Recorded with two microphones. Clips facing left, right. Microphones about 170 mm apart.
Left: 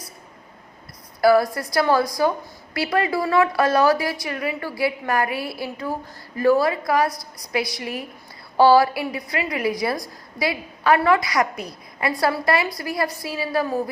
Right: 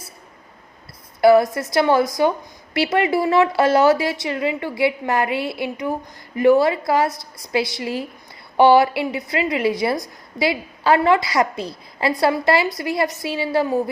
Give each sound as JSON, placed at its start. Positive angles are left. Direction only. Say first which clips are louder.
{"t": 1.2, "sound": "a woman's voice", "louder": "right 3 dB", "side_deg": -20}